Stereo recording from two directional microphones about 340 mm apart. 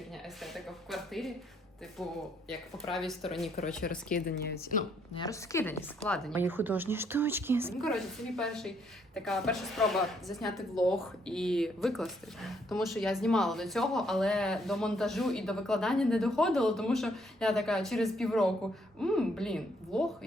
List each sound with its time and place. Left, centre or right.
0.4 s a woman's voice: centre
2.5 s a woman's voice: centre
4.1 s speech: left
5.1 s a woman's voice: centre